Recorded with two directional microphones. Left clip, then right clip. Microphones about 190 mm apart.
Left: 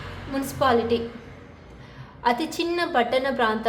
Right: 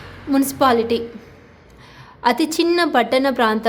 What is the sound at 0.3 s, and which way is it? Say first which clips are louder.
Speech: right 6 dB; 50° right (ahead or behind).